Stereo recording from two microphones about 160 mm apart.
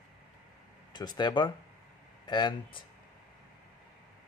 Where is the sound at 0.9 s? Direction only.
25° left (ahead or behind).